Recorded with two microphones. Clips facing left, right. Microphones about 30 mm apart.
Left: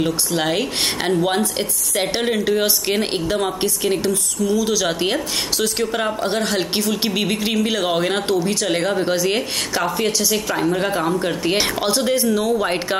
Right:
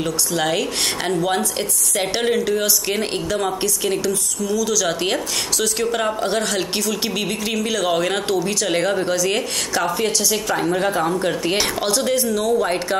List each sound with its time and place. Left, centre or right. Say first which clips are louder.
0.0 s speech: left 1 dB; centre
4.5 s speech: left 1 dB; left
5.9 s speech: right 1 dB; centre
6.2 s speech: left 1 dB; centre
9.0 s speech: left 1 dB; left
9.8 s speech: even; centre